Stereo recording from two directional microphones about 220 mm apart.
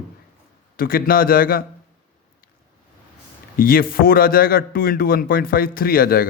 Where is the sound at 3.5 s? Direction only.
40° left (ahead or behind).